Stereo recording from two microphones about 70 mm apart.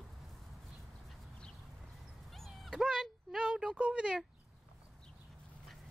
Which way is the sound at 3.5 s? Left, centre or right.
Centre.